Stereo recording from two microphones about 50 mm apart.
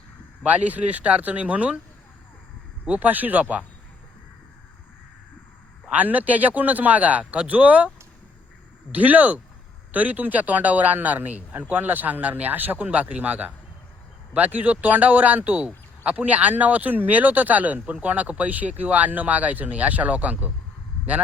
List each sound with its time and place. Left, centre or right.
0.4 s speech: right
2.8 s speech: right
5.9 s speech: right
8.9 s speech: right